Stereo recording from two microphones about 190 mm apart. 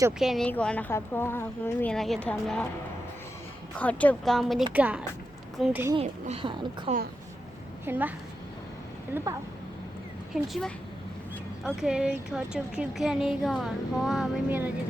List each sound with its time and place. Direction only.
0.2 s a woman's voice: centre (ahead or behind)
3.8 s a woman's voice: 5° left (ahead or behind)
6.0 s a woman's voice: 35° right (ahead or behind)
7.9 s a woman's voice: 10° right (ahead or behind)
9.1 s a woman's voice: 10° right (ahead or behind)
10.3 s speech: centre (ahead or behind)